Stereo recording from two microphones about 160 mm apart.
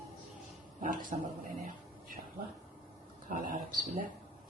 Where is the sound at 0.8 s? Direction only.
55° right (ahead or behind).